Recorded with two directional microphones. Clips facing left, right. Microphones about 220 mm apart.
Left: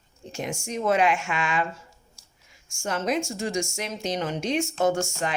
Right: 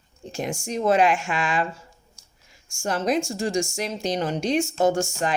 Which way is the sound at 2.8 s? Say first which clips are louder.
Right 3 dB; 35° right (ahead or behind).